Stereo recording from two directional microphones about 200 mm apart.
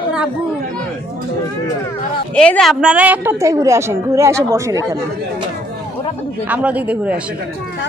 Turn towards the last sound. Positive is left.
turn(degrees=-5)  # may be behind; listen again after turning